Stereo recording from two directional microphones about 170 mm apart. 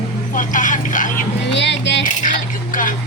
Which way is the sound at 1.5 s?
90° left.